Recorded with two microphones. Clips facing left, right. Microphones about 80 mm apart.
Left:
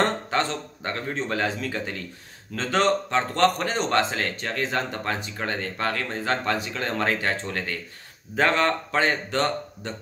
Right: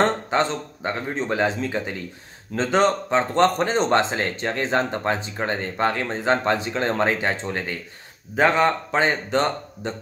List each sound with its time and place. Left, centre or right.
0.0 s a man's voice: right